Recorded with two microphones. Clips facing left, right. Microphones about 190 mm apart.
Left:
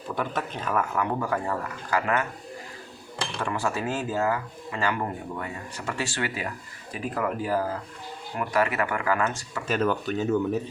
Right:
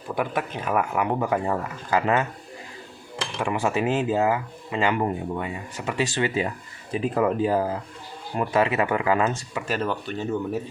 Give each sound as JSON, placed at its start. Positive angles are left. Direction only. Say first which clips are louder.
{"t": 0.2, "sound": "speech", "louder": "right 4 dB", "side_deg": -15}
{"t": 3.4, "sound": "speech", "louder": "right 5 dB", "side_deg": -15}
{"t": 9.6, "sound": "speech", "louder": "left 3 dB", "side_deg": 0}